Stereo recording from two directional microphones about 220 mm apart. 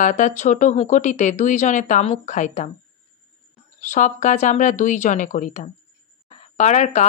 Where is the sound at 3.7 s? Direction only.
35° left (ahead or behind).